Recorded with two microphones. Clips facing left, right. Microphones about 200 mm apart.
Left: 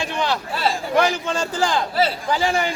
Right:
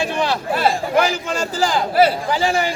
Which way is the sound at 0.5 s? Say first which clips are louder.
Right 8 dB; 50° right (ahead or behind).